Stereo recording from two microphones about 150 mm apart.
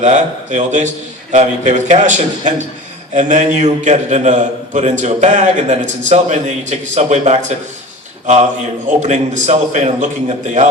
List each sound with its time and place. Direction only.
0.0 s a man's voice: 55° right (ahead or behind)
9.0 s a man's voice: 50° right (ahead or behind)